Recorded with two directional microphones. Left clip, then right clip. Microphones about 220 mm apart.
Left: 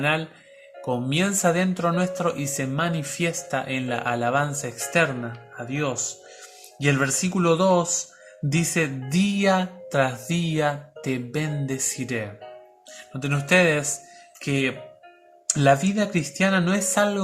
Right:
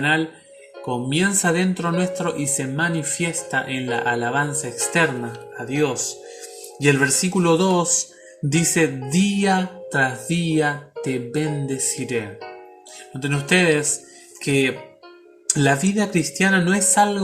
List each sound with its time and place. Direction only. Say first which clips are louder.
0.9 s speech: right 3 dB; 15° left (ahead or behind)
13.2 s speech: right 1 dB; 15° left (ahead or behind)